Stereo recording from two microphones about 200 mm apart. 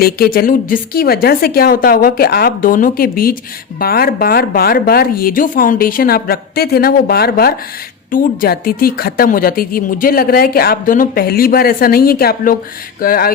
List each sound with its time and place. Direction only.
0.0 s a woman's voice: 50° left (ahead or behind)